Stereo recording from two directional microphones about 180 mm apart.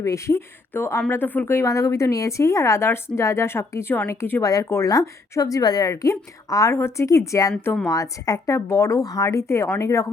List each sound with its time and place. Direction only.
0.0 s speech: 15° left (ahead or behind)